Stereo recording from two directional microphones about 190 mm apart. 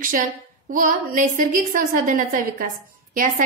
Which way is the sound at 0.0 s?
45° right (ahead or behind).